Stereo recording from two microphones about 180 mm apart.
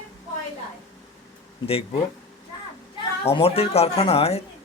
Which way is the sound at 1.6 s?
30° left (ahead or behind).